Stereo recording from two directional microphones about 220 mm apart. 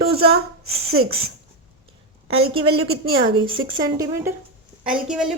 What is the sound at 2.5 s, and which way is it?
Speech, 25° right (ahead or behind).